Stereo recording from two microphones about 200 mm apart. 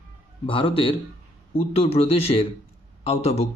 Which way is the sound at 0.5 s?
25° left (ahead or behind).